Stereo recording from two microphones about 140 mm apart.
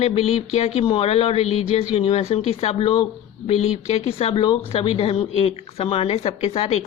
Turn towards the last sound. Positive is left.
turn(degrees=50)  # may be behind; listen again after turning